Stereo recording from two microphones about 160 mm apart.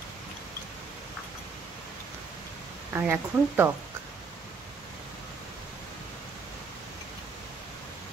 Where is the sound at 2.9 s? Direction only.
15° right (ahead or behind).